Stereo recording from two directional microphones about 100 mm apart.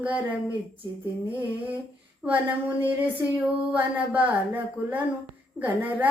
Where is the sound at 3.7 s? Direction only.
15° right (ahead or behind).